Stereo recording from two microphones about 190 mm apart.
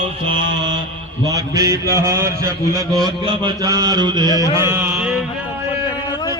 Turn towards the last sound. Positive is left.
turn(degrees=-10)  # may be behind; listen again after turning